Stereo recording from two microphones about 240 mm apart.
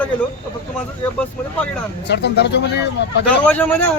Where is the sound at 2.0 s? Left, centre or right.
Left.